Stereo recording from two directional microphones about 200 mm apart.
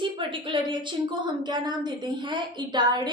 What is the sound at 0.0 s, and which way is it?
A woman's voice, 25° right (ahead or behind).